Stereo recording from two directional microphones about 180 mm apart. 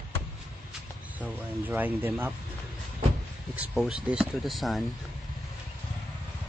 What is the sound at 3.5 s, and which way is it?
Speech, 5° right (ahead or behind).